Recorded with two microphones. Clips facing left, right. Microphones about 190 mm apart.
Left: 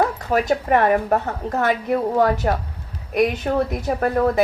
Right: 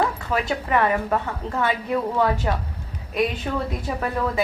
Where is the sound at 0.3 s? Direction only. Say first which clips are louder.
Left 5 dB; 45° left (ahead or behind).